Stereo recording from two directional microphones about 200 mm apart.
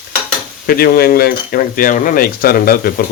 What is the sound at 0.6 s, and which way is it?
Speech, 50° left (ahead or behind).